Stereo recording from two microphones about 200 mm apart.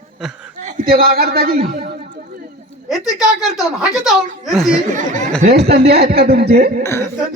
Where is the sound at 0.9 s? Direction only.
50° right (ahead or behind).